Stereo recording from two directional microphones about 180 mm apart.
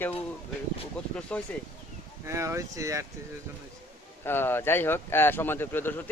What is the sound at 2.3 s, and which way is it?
Speech, 15° right (ahead or behind).